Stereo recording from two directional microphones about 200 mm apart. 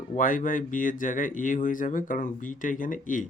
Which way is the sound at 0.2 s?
40° left (ahead or behind).